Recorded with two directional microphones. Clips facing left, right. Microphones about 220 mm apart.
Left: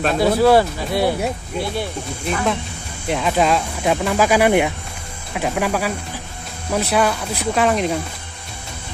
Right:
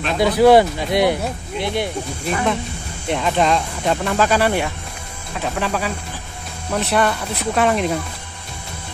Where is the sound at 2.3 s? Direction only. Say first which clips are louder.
Even; centre (ahead or behind).